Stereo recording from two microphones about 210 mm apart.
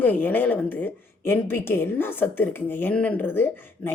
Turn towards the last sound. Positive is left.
turn(degrees=10)  # may be behind; listen again after turning